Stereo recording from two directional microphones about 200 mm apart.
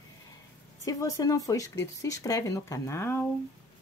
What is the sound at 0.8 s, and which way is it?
Speech, 15° left (ahead or behind).